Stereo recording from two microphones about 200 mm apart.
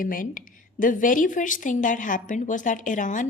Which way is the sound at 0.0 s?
45° left (ahead or behind).